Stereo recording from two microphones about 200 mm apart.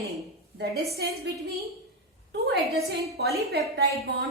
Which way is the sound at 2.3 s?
55° right (ahead or behind).